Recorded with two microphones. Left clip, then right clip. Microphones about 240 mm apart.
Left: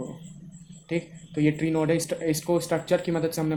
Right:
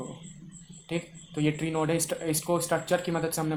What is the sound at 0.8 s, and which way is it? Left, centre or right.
Speech, centre.